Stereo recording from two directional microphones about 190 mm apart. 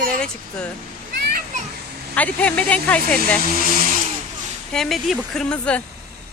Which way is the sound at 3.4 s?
50° right (ahead or behind).